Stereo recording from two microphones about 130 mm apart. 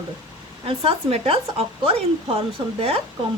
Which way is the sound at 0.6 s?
45° right (ahead or behind).